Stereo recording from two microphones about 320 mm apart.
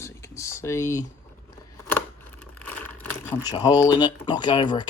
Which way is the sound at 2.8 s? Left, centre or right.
Right.